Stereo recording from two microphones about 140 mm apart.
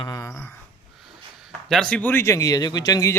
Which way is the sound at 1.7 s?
5° left (ahead or behind).